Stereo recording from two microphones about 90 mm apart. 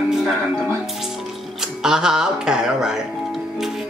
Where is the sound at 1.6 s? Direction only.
5° right (ahead or behind).